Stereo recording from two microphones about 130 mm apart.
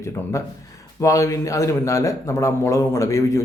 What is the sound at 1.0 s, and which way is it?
A man's voice, 25° left (ahead or behind).